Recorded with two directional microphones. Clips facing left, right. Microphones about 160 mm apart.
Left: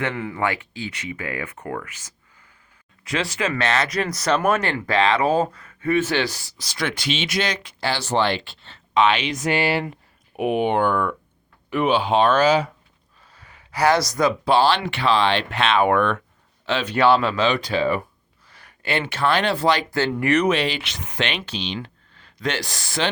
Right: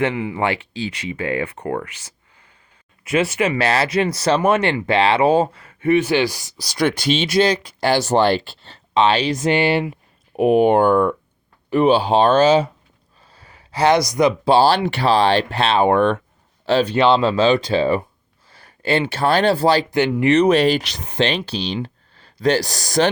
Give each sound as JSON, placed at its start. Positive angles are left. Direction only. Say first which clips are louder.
{"t": 0.0, "sound": "speech", "louder": "right 5 dB", "side_deg": -15}
{"t": 0.4, "sound": "speech", "louder": "right 2 dB", "side_deg": -30}
{"t": 3.1, "sound": "speech", "louder": "right 6 dB", "side_deg": -25}
{"t": 6.0, "sound": "speech", "louder": "right 4 dB", "side_deg": -10}
{"t": 6.6, "sound": "speech", "louder": "right 8 dB", "side_deg": -35}
{"t": 7.8, "sound": "speech", "louder": "right 5 dB", "side_deg": -45}
{"t": 10.3, "sound": "speech", "louder": "right 7 dB", "side_deg": -40}
{"t": 14.5, "sound": "speech", "louder": "right 3 dB", "side_deg": -35}
{"t": 20.5, "sound": "speech", "louder": "right 7 dB", "side_deg": -40}